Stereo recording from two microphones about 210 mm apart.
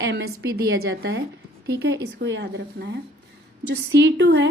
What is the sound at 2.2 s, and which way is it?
Speech, 50° right (ahead or behind).